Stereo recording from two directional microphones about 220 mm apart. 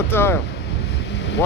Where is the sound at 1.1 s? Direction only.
50° left (ahead or behind).